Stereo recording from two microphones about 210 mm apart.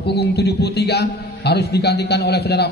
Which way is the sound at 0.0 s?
50° left (ahead or behind).